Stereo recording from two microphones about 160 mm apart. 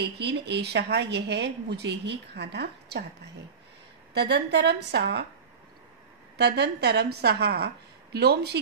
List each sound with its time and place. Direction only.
0.2 s speech: 90° right
4.1 s speech: 90° right
6.3 s speech: 90° right